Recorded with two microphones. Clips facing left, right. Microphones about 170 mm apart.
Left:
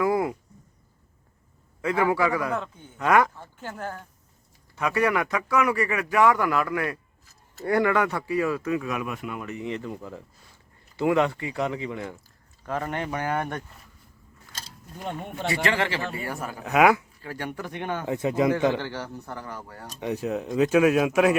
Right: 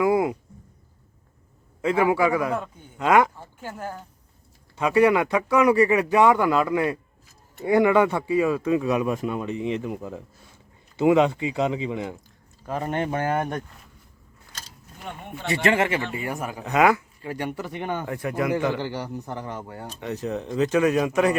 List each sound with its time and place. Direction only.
0.0 s a sound: 15° right (ahead or behind)
2.1 s speech: 20° right (ahead or behind)
2.5 s speech: 10° right (ahead or behind)
4.8 s speech: 25° right (ahead or behind)
15.5 s speech: 25° right (ahead or behind)
16.6 s speech: 10° left (ahead or behind)
17.2 s speech: 15° right (ahead or behind)
18.0 s speech: 20° left (ahead or behind)
18.8 s speech: 15° right (ahead or behind)
20.0 s speech: 10° left (ahead or behind)